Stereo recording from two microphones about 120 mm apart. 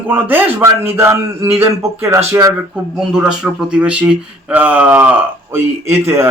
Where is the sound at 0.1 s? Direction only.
15° right (ahead or behind).